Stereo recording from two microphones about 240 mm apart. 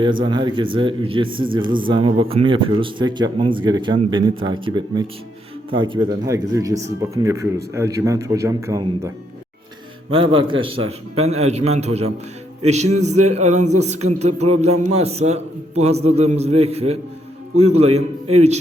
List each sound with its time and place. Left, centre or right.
0.0 s speech: centre